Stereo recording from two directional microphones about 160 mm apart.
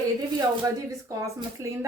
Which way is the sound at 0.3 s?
20° right (ahead or behind).